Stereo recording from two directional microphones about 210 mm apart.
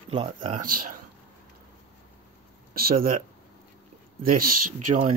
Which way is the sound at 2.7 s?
45° right (ahead or behind).